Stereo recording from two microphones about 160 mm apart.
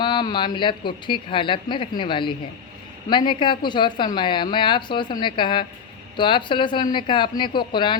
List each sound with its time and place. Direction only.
0.0 s a woman's voice: 30° left (ahead or behind)